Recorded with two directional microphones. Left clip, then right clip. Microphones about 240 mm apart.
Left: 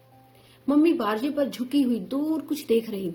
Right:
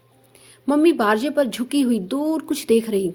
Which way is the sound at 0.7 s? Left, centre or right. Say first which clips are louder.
Right 5 dB; right.